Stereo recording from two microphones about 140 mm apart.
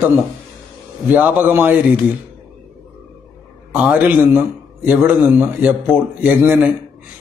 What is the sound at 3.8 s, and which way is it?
A man's voice, 10° right (ahead or behind).